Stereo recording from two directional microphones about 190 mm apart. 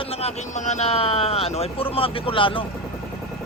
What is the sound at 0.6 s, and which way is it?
Speech, 40° left (ahead or behind).